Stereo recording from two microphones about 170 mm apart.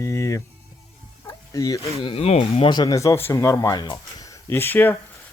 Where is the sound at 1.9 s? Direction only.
30° left (ahead or behind).